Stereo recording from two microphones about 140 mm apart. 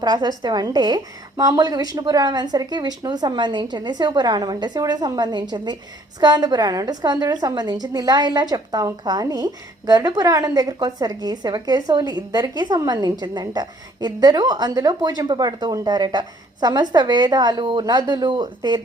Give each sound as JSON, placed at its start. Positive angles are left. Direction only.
{"t": 0.0, "sound": "a woman's voice", "side_deg": -30}